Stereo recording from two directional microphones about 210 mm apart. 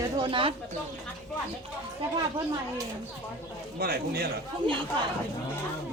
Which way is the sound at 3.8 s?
50° right (ahead or behind).